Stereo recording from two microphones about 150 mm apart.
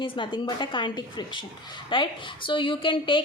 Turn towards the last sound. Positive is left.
turn(degrees=35)  # may be behind; listen again after turning